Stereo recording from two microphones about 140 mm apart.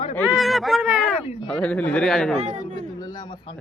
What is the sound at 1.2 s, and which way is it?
Speech, 45° left (ahead or behind).